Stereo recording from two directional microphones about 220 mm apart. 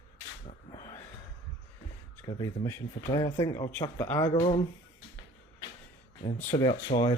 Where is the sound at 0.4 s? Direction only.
20° left (ahead or behind).